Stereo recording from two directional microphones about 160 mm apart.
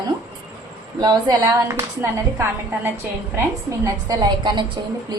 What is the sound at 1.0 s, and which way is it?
A woman's voice, 25° right (ahead or behind).